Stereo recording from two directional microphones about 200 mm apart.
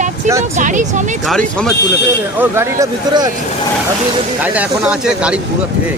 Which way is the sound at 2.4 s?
15° right (ahead or behind).